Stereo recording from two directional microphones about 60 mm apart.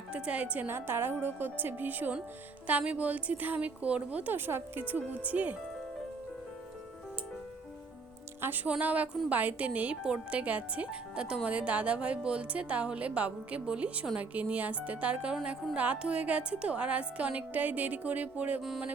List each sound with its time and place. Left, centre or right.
0.1 s a woman's voice: right
0.7 s a woman's voice: right
8.4 s a woman's voice: right